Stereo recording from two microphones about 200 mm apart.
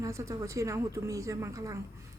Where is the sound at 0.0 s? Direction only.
15° right (ahead or behind).